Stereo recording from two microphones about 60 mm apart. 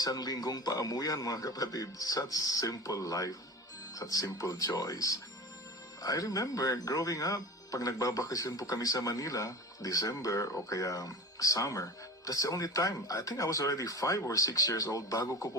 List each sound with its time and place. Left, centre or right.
0.0 s speech: left